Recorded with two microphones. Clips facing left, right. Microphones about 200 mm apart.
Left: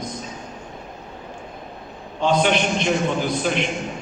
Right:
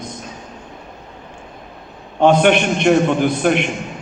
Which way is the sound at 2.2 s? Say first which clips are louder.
Right 6 dB; 60° right (ahead or behind).